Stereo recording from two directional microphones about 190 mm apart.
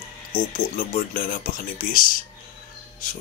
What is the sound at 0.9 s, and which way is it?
Speech, 45° left (ahead or behind).